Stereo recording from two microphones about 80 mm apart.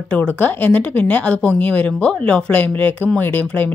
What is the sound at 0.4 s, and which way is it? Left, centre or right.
Speech, left.